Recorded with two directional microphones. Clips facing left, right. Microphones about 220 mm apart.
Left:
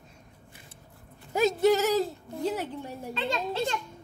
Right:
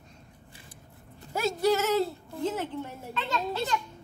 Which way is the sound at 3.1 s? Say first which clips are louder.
Left 1 dB; 30° left (ahead or behind).